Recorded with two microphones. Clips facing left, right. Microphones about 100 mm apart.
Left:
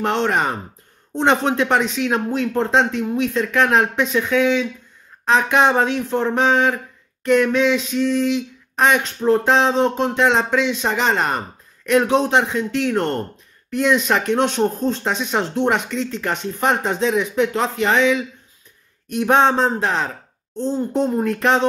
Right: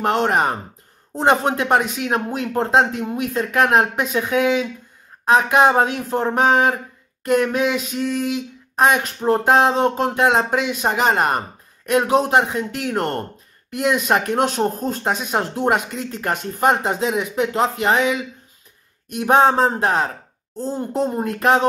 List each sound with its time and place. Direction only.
0.0 s speech: 45° right (ahead or behind)